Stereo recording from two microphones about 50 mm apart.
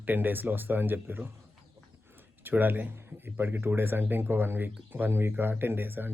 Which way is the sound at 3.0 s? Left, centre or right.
Right.